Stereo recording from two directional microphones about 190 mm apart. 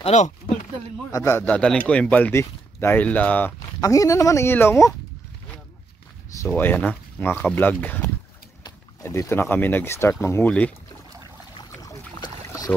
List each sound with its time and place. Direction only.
0.0 s speech: 40° left (ahead or behind)
1.1 s speech: 15° left (ahead or behind)
3.5 s speech: 20° left (ahead or behind)
6.4 s speech: 10° left (ahead or behind)
11.7 s boat: 20° left (ahead or behind)